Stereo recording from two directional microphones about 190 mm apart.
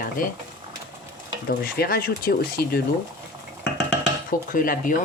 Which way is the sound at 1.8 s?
55° left (ahead or behind).